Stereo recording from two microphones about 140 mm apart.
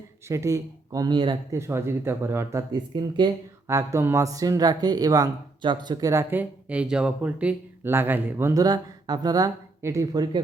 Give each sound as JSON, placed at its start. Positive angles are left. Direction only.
{"t": 0.3, "sound": "speech", "side_deg": -20}
{"t": 1.5, "sound": "speech", "side_deg": -20}
{"t": 3.2, "sound": "speech", "side_deg": -30}
{"t": 3.7, "sound": "speech", "side_deg": -20}
{"t": 6.4, "sound": "speech", "side_deg": -10}